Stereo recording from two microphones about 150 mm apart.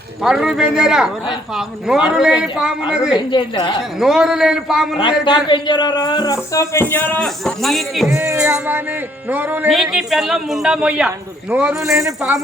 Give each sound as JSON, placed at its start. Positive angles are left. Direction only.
{"t": 0.2, "sound": "a man's voice", "side_deg": -5}
{"t": 3.3, "sound": "a woman's voice", "side_deg": 30}
{"t": 4.0, "sound": "a man's voice", "side_deg": -5}
{"t": 4.9, "sound": "a man's voice", "side_deg": 35}
{"t": 8.1, "sound": "music", "side_deg": -20}
{"t": 8.4, "sound": "speech", "side_deg": -5}
{"t": 9.7, "sound": "a man's voice", "side_deg": 0}
{"t": 11.9, "sound": "music", "side_deg": -20}